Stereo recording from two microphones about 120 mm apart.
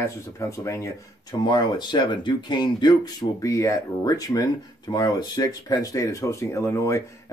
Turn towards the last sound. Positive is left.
turn(degrees=25)  # may be behind; listen again after turning